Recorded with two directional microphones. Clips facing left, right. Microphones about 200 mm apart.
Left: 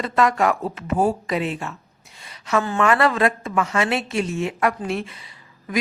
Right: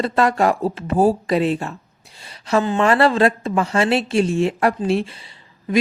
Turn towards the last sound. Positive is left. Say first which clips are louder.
# right 6 dB
turn(degrees=-30)  # may be behind; listen again after turning